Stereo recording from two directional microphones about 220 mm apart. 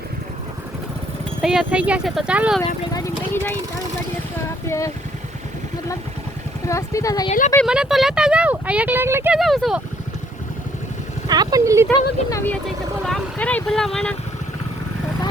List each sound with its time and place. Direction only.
1.4 s speech: 5° right (ahead or behind)
2.9 s speech: 10° left (ahead or behind)
6.7 s speech: 15° left (ahead or behind)
7.3 s speech: 35° left (ahead or behind)
7.5 s speech: centre (ahead or behind)
11.3 s speech: 15° right (ahead or behind)
11.9 s speech: 10° left (ahead or behind)